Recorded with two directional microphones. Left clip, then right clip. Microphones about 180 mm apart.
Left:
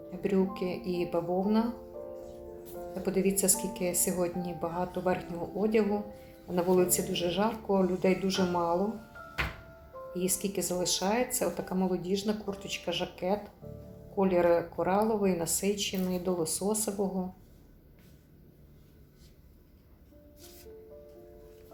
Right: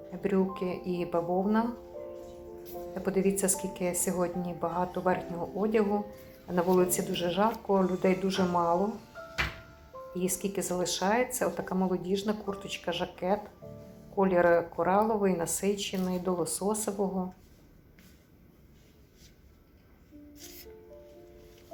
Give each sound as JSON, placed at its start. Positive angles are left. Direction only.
{"t": 0.2, "sound": "speech", "side_deg": 0}
{"t": 2.9, "sound": "speech", "side_deg": 0}
{"t": 10.1, "sound": "speech", "side_deg": 0}
{"t": 20.4, "sound": "music", "side_deg": -35}